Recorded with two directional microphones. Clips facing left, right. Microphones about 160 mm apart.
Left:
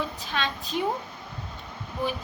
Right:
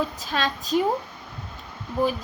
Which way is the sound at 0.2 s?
40° right (ahead or behind).